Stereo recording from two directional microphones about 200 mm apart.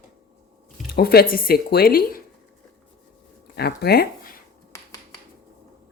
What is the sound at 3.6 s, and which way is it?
Speech, 50° left (ahead or behind).